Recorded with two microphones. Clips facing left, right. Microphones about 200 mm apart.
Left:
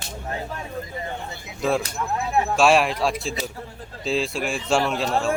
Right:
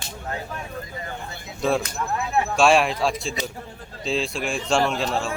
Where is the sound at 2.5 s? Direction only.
Centre (ahead or behind).